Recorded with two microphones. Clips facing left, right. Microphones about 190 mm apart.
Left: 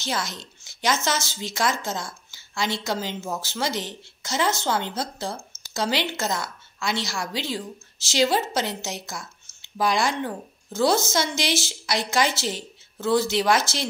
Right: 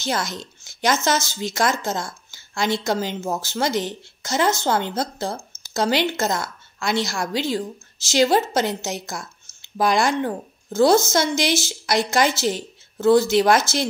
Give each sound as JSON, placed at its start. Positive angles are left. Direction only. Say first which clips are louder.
{"t": 0.0, "sound": "a woman's voice", "louder": "right 4 dB", "side_deg": -50}